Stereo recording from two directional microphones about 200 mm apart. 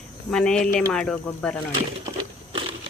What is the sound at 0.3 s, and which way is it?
Speech, 5° left (ahead or behind).